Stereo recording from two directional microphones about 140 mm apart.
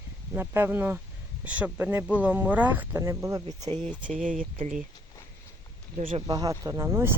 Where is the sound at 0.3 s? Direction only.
15° right (ahead or behind).